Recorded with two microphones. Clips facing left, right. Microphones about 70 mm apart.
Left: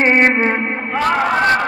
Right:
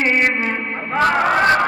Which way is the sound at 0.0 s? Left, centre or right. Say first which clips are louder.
Left 5 dB; left.